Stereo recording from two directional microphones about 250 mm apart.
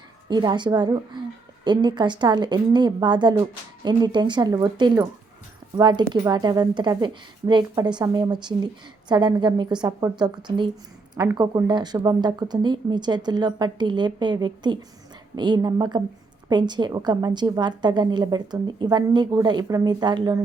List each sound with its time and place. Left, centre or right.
0.3 s a woman's voice: centre